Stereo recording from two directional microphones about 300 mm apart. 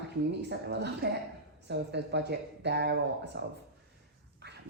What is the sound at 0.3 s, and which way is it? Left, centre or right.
A woman's voice, right.